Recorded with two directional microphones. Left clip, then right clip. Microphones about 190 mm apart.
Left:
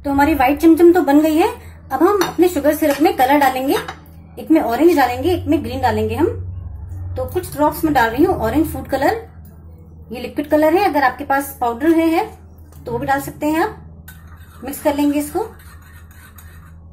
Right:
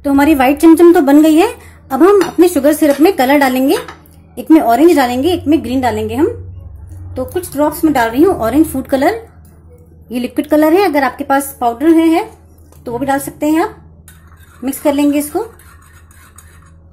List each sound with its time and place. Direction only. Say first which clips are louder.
0.0 s a woman's voice: right 4 dB; 45° right (ahead or behind)
10.0 s a woman's voice: right 6 dB; 50° right (ahead or behind)